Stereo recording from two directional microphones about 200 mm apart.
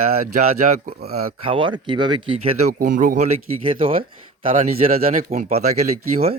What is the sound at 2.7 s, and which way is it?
Speech, 40° right (ahead or behind).